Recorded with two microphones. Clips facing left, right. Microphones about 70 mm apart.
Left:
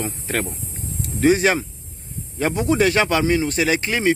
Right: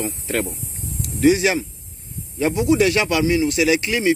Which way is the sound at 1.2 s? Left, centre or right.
Left.